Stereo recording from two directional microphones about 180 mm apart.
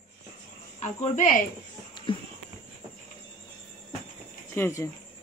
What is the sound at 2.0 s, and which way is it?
Music, 25° left (ahead or behind).